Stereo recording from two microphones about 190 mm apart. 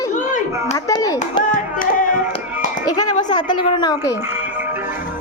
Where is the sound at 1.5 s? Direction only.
45° left (ahead or behind).